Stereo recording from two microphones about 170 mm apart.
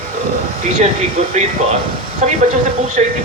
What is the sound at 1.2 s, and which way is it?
A man's voice, 40° right (ahead or behind).